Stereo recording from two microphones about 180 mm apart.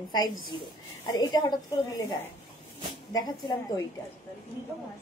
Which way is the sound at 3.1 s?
20° left (ahead or behind).